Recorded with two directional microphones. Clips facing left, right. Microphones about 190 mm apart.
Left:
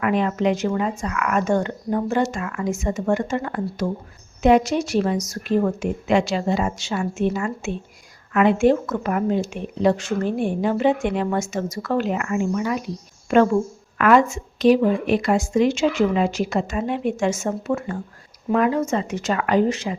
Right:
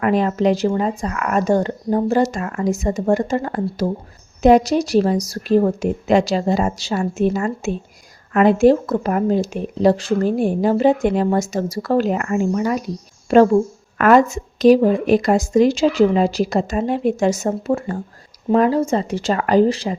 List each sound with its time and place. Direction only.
0.0 s a woman's voice: 35° right (ahead or behind)